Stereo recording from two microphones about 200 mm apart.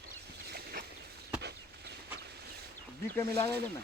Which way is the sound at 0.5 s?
50° right (ahead or behind).